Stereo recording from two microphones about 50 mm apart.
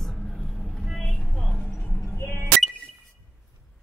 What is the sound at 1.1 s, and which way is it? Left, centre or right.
Vehicle, centre.